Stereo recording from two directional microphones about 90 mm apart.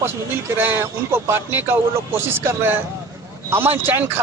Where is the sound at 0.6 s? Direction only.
20° right (ahead or behind).